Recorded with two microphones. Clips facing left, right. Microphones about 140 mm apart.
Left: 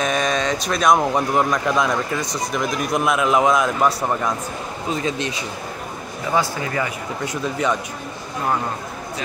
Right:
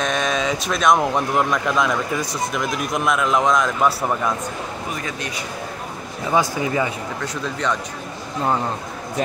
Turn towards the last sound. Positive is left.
turn(degrees=10)  # may be behind; listen again after turning